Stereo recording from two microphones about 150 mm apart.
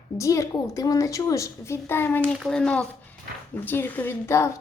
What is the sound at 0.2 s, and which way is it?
A woman's voice, 20° left (ahead or behind).